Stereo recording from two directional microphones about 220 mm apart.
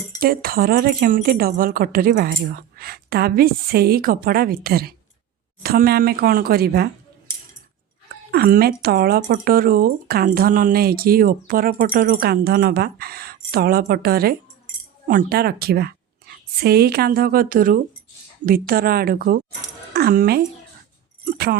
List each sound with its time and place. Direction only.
0.2 s speech: 40° right (ahead or behind)
8.3 s a woman's voice: 45° right (ahead or behind)